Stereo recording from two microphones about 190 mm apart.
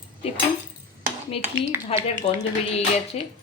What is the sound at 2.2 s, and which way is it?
Speech, 30° left (ahead or behind).